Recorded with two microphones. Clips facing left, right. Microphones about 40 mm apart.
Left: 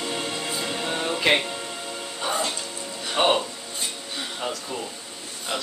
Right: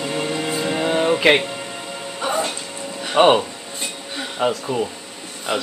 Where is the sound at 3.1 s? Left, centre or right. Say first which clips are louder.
Right 7 dB; right.